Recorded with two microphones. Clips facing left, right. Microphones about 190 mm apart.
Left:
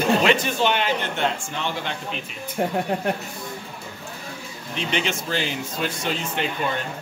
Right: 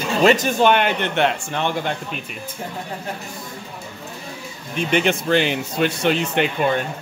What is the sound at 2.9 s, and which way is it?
Speech, 70° left (ahead or behind).